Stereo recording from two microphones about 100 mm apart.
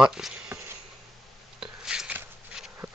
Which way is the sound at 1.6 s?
5° right (ahead or behind).